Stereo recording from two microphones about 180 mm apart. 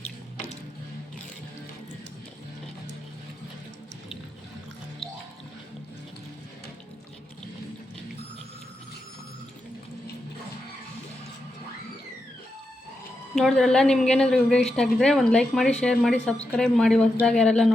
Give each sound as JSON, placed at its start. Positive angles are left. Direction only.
{"t": 13.3, "sound": "a woman's voice", "side_deg": 0}